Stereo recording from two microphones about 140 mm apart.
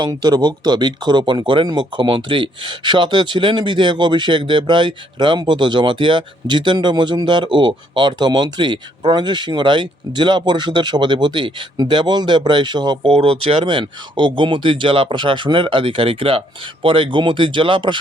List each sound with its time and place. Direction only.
0.0 s speech: 30° right (ahead or behind)
13.1 s speech: 45° right (ahead or behind)